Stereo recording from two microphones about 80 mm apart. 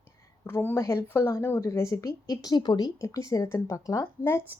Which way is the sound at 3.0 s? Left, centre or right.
Left.